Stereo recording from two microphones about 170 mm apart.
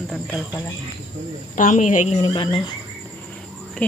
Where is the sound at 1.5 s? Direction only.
50° left (ahead or behind).